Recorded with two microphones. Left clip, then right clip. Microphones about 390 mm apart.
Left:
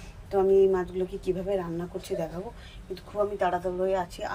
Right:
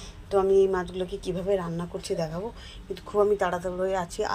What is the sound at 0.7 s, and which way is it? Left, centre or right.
Speech, centre.